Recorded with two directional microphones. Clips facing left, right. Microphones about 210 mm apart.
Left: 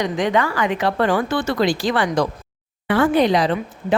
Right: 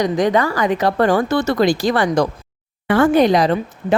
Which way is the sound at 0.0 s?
40° right (ahead or behind).